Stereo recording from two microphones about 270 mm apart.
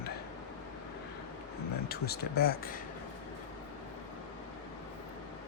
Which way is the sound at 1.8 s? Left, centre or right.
Left.